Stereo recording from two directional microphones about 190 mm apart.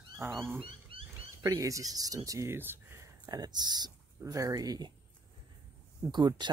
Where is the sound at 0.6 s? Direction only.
30° right (ahead or behind).